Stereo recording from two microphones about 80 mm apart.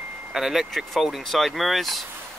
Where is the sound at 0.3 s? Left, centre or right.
Centre.